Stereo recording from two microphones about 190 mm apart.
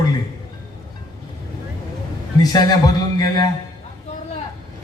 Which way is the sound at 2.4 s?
20° left (ahead or behind).